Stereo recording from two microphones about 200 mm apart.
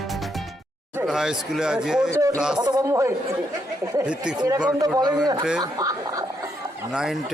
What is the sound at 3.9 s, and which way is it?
Speech, 5° right (ahead or behind).